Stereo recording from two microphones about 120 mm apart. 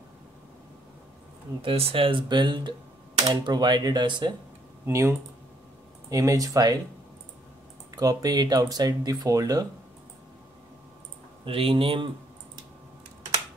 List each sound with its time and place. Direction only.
1.6 s speech: 50° right (ahead or behind)
4.8 s speech: 25° right (ahead or behind)
7.9 s speech: 30° right (ahead or behind)
11.4 s speech: 50° right (ahead or behind)